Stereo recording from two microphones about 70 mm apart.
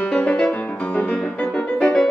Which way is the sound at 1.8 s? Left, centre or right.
Centre.